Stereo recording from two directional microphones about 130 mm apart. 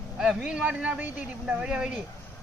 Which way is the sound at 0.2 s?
5° right (ahead or behind).